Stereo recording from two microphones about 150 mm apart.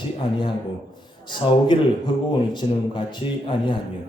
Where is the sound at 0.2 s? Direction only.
35° left (ahead or behind).